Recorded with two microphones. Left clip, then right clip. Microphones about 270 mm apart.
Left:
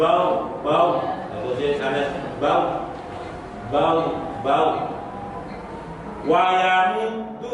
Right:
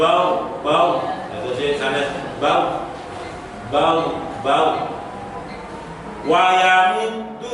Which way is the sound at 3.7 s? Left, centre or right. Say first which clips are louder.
Right 2 dB; centre.